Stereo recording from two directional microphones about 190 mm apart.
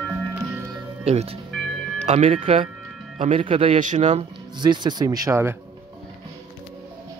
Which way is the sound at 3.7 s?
40° right (ahead or behind).